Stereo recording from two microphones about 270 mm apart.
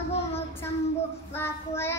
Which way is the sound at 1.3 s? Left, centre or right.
Centre.